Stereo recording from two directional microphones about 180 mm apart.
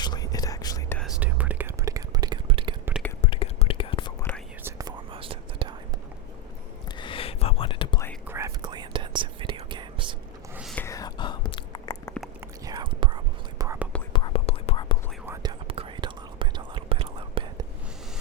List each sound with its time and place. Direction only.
0.0 s whispering: 20° left (ahead or behind)
1.2 s whispering: 10° right (ahead or behind); by 2.7 s 30° right (ahead or behind)
3.2 s whispering: 30° left (ahead or behind)
4.6 s whispering: 20° right (ahead or behind)
6.9 s whispering: 30° left (ahead or behind)
8.3 s whispering: 15° right (ahead or behind)
10.5 s whispering: 5° right (ahead or behind)
10.8 s whispering: 15° left (ahead or behind)
12.0 s biting: 5° left (ahead or behind)
12.6 s whispering: 25° right (ahead or behind)
13.6 s whispering: 15° right (ahead or behind)
14.1 s whispering: 25° left (ahead or behind)
15.6 s whispering: 30° right (ahead or behind)